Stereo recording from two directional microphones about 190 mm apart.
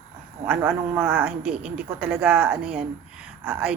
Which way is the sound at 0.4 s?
5° right (ahead or behind).